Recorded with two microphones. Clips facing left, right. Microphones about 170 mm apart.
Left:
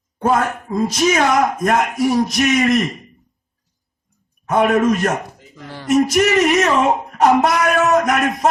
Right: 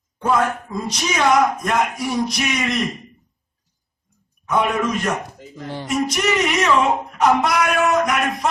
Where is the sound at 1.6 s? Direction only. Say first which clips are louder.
Left 5 dB; 50° left (ahead or behind).